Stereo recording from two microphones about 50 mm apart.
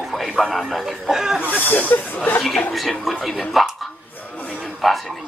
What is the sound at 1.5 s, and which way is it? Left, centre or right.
Speech, left.